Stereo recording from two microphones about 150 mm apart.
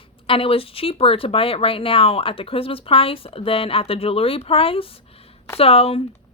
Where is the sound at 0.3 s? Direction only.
40° left (ahead or behind).